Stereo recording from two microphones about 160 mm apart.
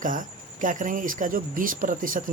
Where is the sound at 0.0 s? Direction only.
55° right (ahead or behind).